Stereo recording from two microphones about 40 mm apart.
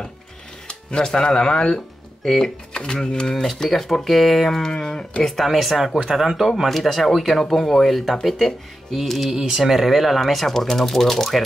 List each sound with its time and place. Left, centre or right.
0.7 s speech: left
3.6 s speech: centre
5.5 s speech: centre
9.3 s speech: centre